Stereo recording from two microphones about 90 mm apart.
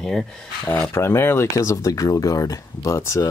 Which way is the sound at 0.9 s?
25° left (ahead or behind).